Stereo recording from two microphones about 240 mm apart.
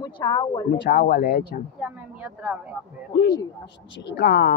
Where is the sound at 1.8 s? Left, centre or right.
Centre.